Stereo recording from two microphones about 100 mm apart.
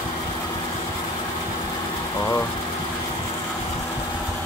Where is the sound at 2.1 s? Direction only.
40° left (ahead or behind).